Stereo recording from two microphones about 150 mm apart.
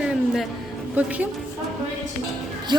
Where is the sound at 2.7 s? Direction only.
30° right (ahead or behind).